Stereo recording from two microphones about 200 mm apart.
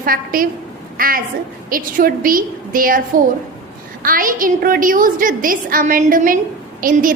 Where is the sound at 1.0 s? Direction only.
45° right (ahead or behind).